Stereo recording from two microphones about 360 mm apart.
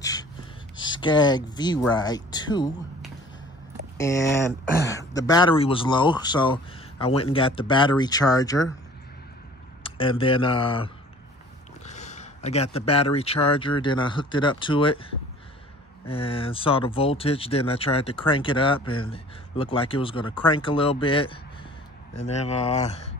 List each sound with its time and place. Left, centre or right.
0.0 s gasp: centre
0.7 s speech: centre
4.0 s speech: centre
9.8 s speech: centre
16.1 s speech: centre